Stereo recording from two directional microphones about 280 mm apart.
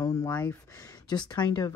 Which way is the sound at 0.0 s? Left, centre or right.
Centre.